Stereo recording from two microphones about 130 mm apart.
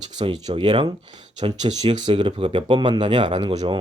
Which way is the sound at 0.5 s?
35° right (ahead or behind).